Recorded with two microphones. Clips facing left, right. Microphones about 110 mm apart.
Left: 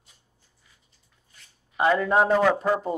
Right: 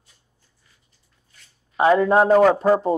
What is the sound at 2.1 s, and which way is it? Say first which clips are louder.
Speech: right 5 dB; 50° right (ahead or behind).